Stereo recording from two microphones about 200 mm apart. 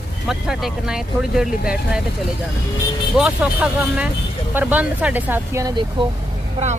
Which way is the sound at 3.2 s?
5° right (ahead or behind).